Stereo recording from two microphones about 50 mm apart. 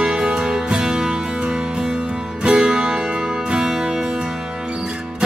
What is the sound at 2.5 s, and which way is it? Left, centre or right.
Music, centre.